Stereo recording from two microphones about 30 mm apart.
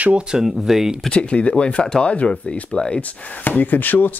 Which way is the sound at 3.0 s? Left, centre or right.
Left.